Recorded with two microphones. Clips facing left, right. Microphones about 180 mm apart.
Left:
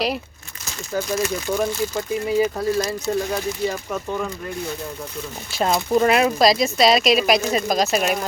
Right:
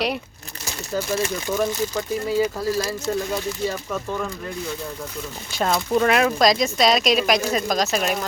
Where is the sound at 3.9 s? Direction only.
5° left (ahead or behind).